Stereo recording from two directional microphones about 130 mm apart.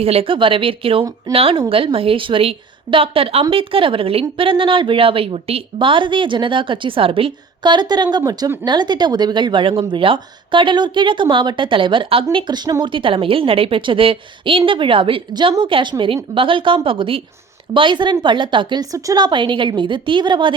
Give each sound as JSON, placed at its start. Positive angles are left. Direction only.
{"t": 0.0, "sound": "speech", "side_deg": -50}